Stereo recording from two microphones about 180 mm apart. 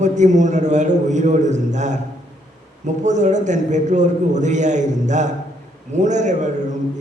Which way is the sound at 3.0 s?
40° right (ahead or behind).